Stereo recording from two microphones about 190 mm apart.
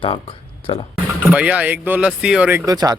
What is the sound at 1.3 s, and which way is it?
Speech, 5° right (ahead or behind).